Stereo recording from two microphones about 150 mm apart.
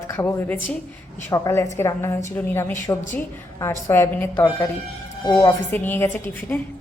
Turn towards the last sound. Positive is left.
turn(degrees=15)  # may be behind; listen again after turning